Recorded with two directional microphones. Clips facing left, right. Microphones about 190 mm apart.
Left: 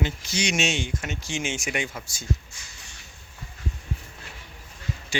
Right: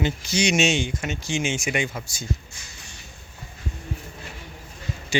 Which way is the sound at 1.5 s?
10° right (ahead or behind).